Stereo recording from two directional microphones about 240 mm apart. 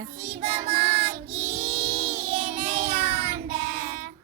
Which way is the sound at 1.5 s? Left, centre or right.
Right.